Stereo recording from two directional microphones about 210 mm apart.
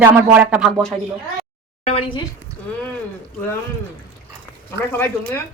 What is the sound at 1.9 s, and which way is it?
Speech, 25° left (ahead or behind).